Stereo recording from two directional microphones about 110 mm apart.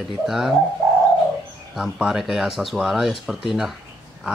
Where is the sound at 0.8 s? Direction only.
25° right (ahead or behind).